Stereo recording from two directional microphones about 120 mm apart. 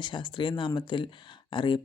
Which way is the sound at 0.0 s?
40° left (ahead or behind).